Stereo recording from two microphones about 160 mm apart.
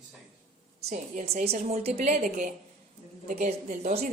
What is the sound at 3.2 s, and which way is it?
Speech, 50° right (ahead or behind).